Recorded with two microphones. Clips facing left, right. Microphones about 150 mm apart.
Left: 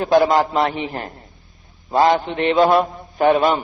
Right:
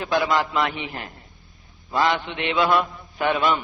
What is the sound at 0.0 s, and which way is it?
A man's voice, 40° left (ahead or behind).